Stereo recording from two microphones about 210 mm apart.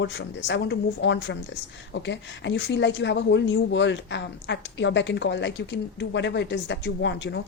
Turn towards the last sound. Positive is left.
turn(degrees=55)  # may be behind; listen again after turning